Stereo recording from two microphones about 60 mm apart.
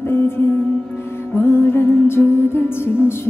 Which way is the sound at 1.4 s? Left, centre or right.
Left.